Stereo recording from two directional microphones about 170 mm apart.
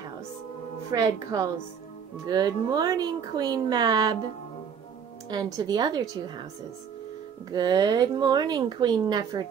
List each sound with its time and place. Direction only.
0.9 s speech: 20° right (ahead or behind)
5.3 s speech: 25° right (ahead or behind)
7.5 s speech: 25° right (ahead or behind)